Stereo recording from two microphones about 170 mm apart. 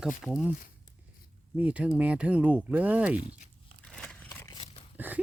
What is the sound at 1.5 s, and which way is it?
Speech, 10° right (ahead or behind).